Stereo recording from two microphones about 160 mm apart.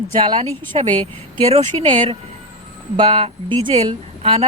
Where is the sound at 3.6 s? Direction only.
40° right (ahead or behind).